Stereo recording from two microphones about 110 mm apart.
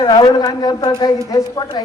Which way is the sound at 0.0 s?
40° left (ahead or behind).